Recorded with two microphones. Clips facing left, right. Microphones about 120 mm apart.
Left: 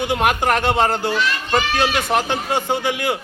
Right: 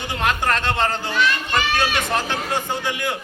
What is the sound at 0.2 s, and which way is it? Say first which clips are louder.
Speech: left 1 dB; 65° left (ahead or behind).